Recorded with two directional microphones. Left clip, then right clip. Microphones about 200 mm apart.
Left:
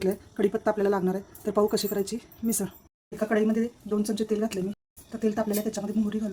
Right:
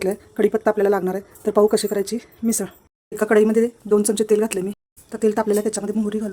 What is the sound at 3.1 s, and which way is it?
Speech, 60° right (ahead or behind).